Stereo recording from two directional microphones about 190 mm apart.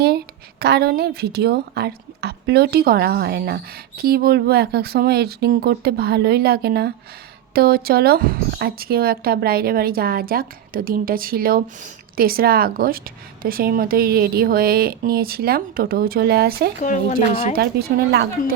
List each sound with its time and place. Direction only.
0.6 s a woman's voice: 55° right (ahead or behind)
16.8 s speech: 40° left (ahead or behind)
17.5 s a woman's voice: 55° right (ahead or behind)